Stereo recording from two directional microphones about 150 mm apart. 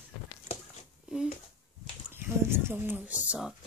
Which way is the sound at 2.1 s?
15° right (ahead or behind).